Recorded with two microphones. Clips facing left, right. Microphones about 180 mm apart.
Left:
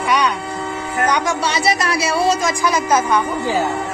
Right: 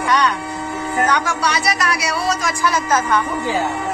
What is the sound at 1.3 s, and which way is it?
A woman's voice, 25° left (ahead or behind).